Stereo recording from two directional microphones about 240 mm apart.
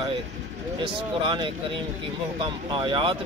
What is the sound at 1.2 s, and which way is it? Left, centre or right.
Speech, right.